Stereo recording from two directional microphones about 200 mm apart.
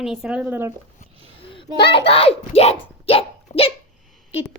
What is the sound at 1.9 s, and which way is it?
A child's voice, 30° left (ahead or behind).